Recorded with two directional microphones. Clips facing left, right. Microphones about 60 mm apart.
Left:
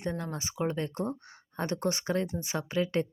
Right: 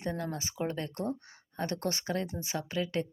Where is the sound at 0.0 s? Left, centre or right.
Left.